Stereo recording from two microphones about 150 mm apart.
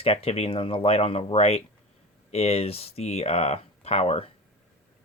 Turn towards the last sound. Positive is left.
turn(degrees=45)  # may be behind; listen again after turning